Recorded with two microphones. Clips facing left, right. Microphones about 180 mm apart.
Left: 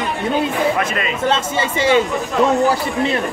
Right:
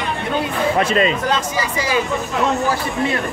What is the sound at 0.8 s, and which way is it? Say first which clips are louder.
Speech: right 5 dB; 30° right (ahead or behind).